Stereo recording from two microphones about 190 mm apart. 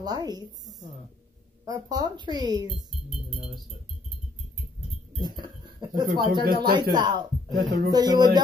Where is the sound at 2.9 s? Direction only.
Centre (ahead or behind).